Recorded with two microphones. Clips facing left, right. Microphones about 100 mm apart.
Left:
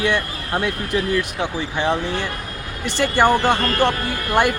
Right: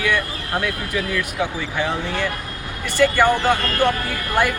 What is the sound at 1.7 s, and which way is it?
Speech, 20° left (ahead or behind).